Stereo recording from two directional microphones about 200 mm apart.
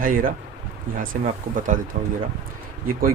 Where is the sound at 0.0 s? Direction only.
45° right (ahead or behind).